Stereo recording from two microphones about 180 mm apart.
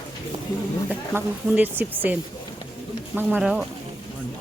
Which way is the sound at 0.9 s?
5° right (ahead or behind).